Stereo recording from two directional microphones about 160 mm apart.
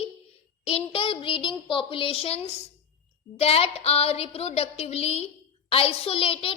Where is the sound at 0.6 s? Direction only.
35° left (ahead or behind).